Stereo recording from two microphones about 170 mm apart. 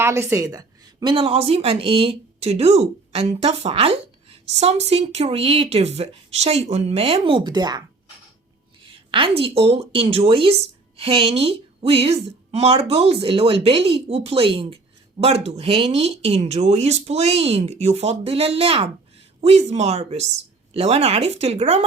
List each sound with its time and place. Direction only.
0.0 s a woman's voice: 15° right (ahead or behind)
1.1 s speech: 35° right (ahead or behind)
8.8 s a sound: 30° right (ahead or behind)
9.4 s speech: 35° right (ahead or behind)